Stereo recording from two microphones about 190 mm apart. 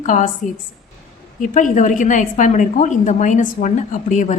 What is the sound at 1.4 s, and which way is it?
A woman's voice, 40° left (ahead or behind).